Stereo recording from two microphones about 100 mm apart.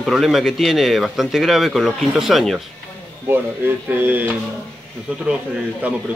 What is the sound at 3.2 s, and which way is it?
Speech, 20° right (ahead or behind).